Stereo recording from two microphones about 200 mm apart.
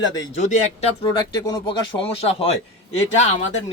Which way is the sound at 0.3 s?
35° left (ahead or behind).